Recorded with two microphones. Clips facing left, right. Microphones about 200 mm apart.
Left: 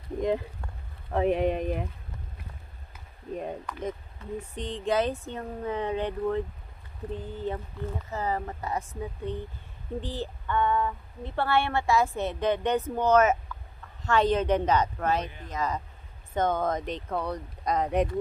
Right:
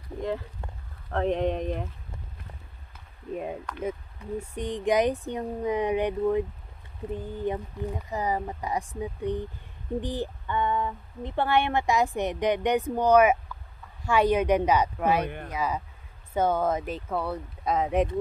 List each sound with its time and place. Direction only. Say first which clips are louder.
1.1 s speech: left 1 dB; 5° left (ahead or behind)
3.3 s speech: right 1 dB; centre (ahead or behind)
4.4 s speech: right 5 dB; 10° right (ahead or behind)
15.2 s speech: right 6 dB; 60° right (ahead or behind)
15.5 s speech: left 1 dB; 10° right (ahead or behind)